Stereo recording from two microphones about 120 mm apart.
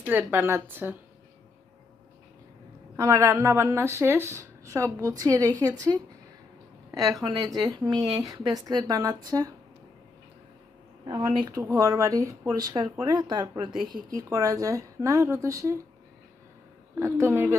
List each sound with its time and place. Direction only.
0.0 s a woman's voice: 15° right (ahead or behind)
3.0 s speech: 25° right (ahead or behind)
11.1 s speech: 30° right (ahead or behind)
17.0 s speech: 20° right (ahead or behind)